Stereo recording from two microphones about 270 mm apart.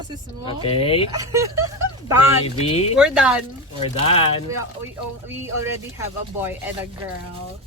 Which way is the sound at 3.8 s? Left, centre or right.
Left.